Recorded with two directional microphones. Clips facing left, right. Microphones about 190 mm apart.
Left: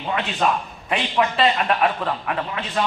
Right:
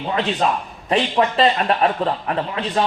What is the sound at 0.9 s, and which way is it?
A man's voice, 35° right (ahead or behind).